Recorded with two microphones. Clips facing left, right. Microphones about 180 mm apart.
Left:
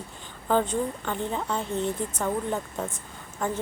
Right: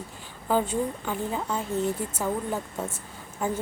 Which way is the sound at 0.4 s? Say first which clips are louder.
Left 1 dB; 5° right (ahead or behind).